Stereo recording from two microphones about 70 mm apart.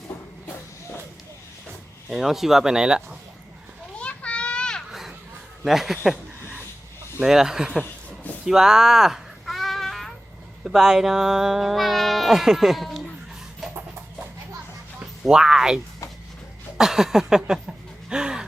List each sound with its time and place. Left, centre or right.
2.0 s speech: centre
4.0 s children playing: centre
4.9 s children playing: centre
5.6 s speech: centre
7.2 s speech: centre
7.8 s a sound: left
8.4 s a sound: centre
10.6 s speech: centre
15.2 s speech: centre
16.7 s a sound: centre